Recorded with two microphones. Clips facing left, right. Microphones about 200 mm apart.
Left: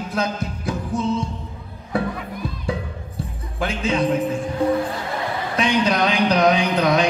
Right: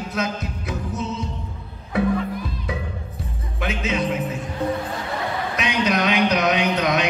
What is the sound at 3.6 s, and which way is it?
Music, 30° left (ahead or behind).